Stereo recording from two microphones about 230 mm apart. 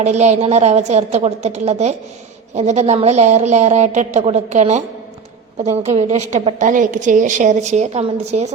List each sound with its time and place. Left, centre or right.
0.0 s a woman's voice: right